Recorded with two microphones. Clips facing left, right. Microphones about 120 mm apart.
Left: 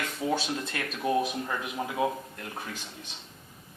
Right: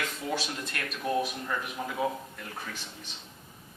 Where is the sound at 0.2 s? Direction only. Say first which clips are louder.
Left 6 dB; 15° left (ahead or behind).